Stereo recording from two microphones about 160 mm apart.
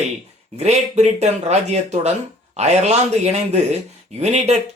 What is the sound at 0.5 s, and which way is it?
Speech, 45° right (ahead or behind).